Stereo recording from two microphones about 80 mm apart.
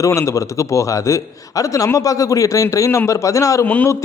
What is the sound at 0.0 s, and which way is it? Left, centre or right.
A man's voice, left.